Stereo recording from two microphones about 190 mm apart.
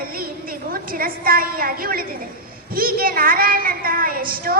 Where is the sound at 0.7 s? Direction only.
50° right (ahead or behind).